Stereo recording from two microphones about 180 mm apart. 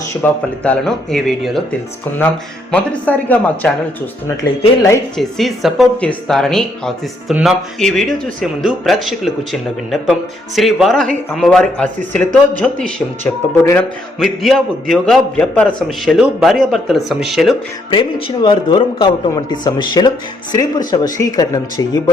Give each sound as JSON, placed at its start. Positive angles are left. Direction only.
{"t": 0.2, "sound": "speech", "side_deg": 5}
{"t": 2.7, "sound": "speech", "side_deg": 10}
{"t": 5.1, "sound": "speech", "side_deg": 0}
{"t": 18.4, "sound": "speech", "side_deg": 25}